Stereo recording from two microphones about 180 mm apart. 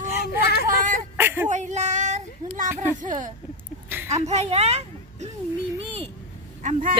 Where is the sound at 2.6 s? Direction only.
10° right (ahead or behind).